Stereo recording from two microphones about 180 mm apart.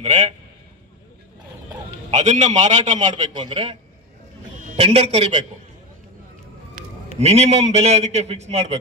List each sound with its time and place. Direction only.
0.0 s a man's voice: 40° right (ahead or behind)
2.0 s a man's voice: 40° right (ahead or behind)
3.3 s a man's voice: 30° right (ahead or behind)
4.7 s a man's voice: 35° right (ahead or behind)
7.2 s a man's voice: 35° right (ahead or behind)